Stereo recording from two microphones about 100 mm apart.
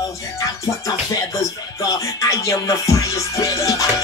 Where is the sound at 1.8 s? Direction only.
35° left (ahead or behind).